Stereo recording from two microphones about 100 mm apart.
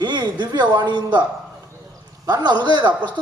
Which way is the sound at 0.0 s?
50° right (ahead or behind).